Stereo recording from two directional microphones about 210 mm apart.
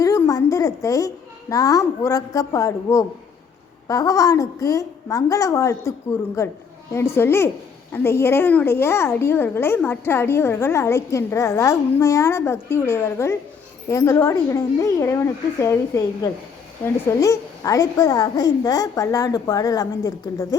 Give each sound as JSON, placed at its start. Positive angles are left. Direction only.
{"t": 0.0, "sound": "a child's voice", "side_deg": 15}